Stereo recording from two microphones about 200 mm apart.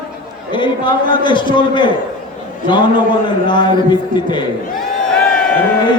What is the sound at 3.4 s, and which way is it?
A man's voice, 20° left (ahead or behind).